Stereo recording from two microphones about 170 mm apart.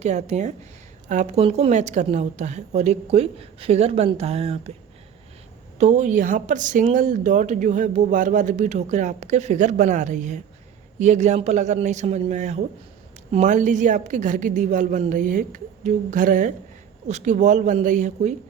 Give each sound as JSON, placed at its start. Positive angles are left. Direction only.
{"t": 0.0, "sound": "a woman's voice", "side_deg": -40}
{"t": 5.8, "sound": "speech", "side_deg": -45}